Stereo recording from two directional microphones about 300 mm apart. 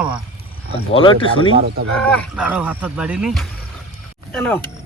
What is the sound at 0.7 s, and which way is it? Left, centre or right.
Speech, centre.